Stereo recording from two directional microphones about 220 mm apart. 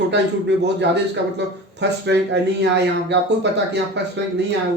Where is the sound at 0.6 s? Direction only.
50° right (ahead or behind).